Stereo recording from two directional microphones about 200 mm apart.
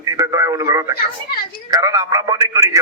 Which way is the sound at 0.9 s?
50° left (ahead or behind).